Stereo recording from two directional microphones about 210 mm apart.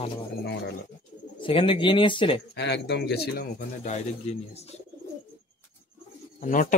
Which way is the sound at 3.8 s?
30° left (ahead or behind).